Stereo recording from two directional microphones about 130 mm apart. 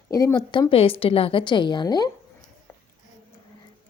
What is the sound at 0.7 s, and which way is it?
A woman's voice, 45° left (ahead or behind).